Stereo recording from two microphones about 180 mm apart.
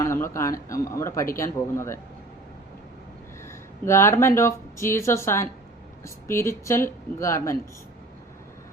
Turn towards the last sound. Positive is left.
turn(degrees=15)  # may be behind; listen again after turning